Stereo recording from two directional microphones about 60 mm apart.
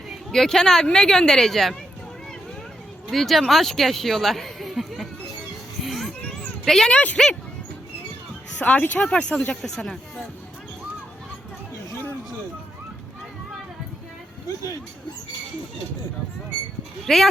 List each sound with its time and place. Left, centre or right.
0.3 s speech: centre
3.1 s speech: centre
5.8 s children playing: centre
6.7 s speech: centre
6.9 s speech: left
8.5 s speech: left
9.0 s speech: centre
17.1 s speech: centre